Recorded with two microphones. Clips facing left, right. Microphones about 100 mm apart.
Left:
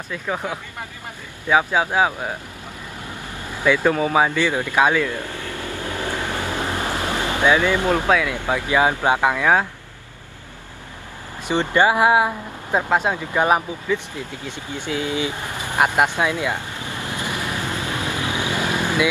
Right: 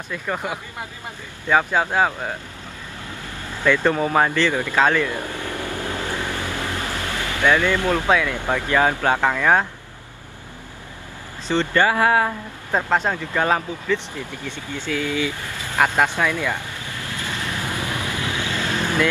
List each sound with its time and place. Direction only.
0.1 s speech: centre (ahead or behind)
3.6 s speech: 5° left (ahead or behind)
5.0 s vehicle: 20° right (ahead or behind)
5.9 s boat: 20° left (ahead or behind)
8.1 s speech: centre (ahead or behind)
8.5 s speech: 15° left (ahead or behind)
11.4 s speech: 15° left (ahead or behind)
16.2 s vehicle: 15° left (ahead or behind)